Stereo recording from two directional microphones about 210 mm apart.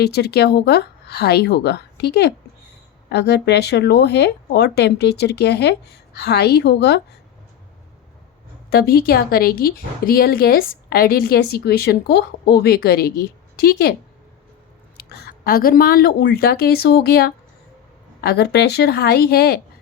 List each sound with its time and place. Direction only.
0.0 s a woman's voice: 50° left (ahead or behind)
8.7 s a woman's voice: 45° left (ahead or behind)
14.9 s a woman's voice: 50° left (ahead or behind)